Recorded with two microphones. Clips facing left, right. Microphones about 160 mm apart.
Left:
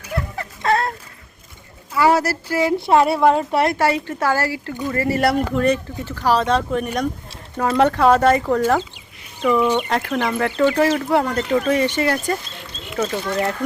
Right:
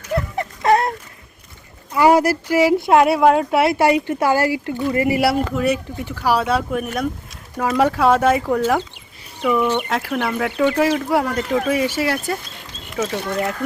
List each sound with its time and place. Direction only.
0.3 s dog: 20° right (ahead or behind)
1.9 s a sound: 15° right (ahead or behind)
2.7 s speech: 5° right (ahead or behind)
3.8 s speech: 15° right (ahead or behind)
5.2 s speech: 5° right (ahead or behind)